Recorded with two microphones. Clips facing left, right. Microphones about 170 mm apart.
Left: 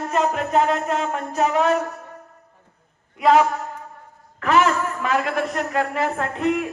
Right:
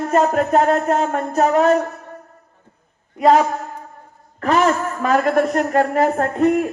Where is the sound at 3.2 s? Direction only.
40° right (ahead or behind).